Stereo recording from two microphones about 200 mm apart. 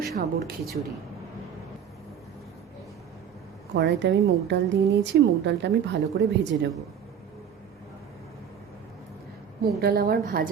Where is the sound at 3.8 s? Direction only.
60° right (ahead or behind).